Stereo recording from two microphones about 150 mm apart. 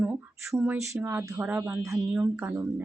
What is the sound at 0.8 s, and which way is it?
Speech, 15° right (ahead or behind).